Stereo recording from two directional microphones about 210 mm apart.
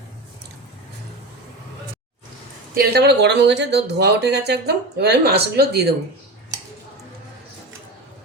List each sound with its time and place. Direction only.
2.7 s speech: 50° right (ahead or behind)